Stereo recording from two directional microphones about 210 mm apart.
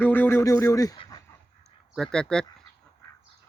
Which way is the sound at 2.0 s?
5° left (ahead or behind).